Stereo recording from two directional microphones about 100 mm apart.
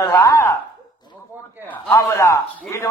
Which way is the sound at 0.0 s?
35° left (ahead or behind).